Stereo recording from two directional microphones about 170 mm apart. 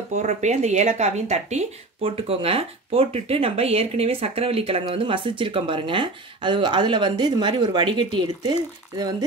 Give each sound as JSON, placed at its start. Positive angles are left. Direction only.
{"t": 0.1, "sound": "speech", "side_deg": -45}